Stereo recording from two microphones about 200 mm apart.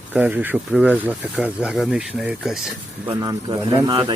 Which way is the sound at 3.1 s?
20° right (ahead or behind).